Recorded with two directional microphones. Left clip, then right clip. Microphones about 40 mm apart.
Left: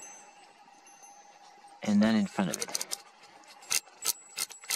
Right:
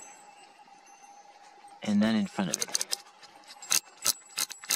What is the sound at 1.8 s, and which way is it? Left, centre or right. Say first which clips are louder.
Speech: left 1 dB; left.